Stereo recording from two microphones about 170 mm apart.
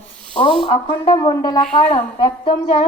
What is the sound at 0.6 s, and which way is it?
A woman's voice, 30° left (ahead or behind).